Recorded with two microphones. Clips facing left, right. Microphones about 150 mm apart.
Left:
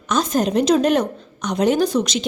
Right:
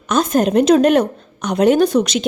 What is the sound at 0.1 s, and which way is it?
A woman's voice, 55° right (ahead or behind).